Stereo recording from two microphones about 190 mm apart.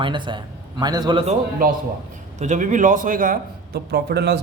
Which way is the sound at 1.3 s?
45° right (ahead or behind).